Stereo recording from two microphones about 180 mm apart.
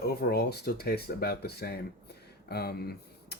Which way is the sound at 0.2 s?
60° left (ahead or behind).